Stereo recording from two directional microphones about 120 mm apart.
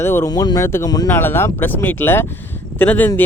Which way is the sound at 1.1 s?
20° left (ahead or behind).